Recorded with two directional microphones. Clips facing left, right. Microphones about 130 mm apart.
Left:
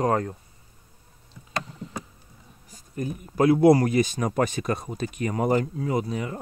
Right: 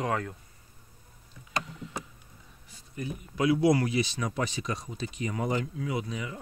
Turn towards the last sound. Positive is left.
turn(degrees=40)  # may be behind; listen again after turning